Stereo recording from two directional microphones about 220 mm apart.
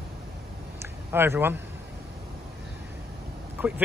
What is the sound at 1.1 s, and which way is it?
Speech, 10° right (ahead or behind).